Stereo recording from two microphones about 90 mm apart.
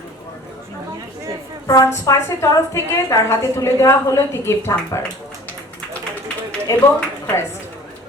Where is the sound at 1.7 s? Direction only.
40° left (ahead or behind).